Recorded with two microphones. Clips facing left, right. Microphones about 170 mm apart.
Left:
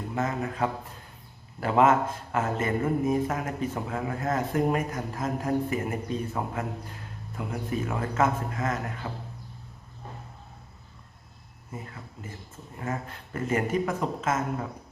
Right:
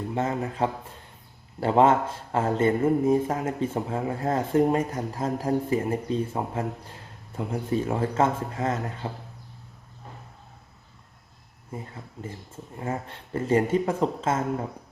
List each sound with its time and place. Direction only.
0.1 s speech: 30° right (ahead or behind)
12.8 s speech: 30° right (ahead or behind)